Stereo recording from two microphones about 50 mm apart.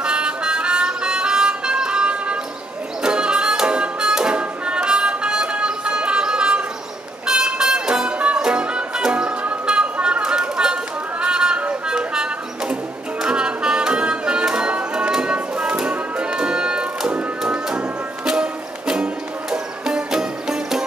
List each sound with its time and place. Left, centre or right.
0.0 s music: centre
10.2 s a sound: centre
11.9 s music: centre
18.2 s music: centre